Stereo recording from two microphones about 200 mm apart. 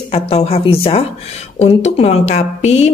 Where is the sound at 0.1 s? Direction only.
30° left (ahead or behind).